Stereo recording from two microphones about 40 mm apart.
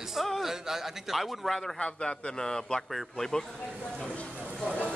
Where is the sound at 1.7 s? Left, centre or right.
Left.